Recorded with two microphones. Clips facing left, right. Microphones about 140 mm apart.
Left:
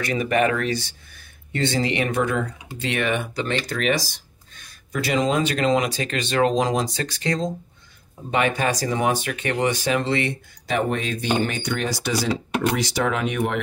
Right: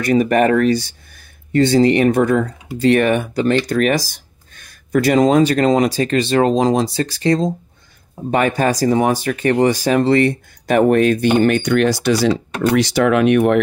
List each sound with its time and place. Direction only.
0.0 s speech: 40° right (ahead or behind); by 13.6 s 65° right (ahead or behind)